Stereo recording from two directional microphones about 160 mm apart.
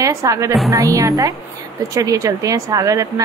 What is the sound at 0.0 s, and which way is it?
Speech, 20° right (ahead or behind).